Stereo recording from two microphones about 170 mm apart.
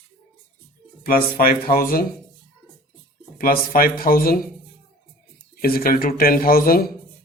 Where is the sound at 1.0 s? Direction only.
60° left (ahead or behind).